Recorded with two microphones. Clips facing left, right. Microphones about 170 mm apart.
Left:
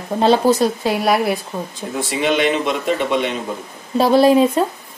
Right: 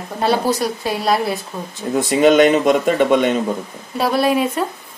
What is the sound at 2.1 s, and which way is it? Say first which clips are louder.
Speech: right 6 dB; 45° right (ahead or behind).